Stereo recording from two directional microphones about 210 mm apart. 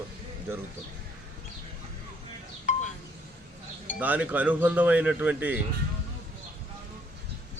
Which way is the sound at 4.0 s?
10° right (ahead or behind).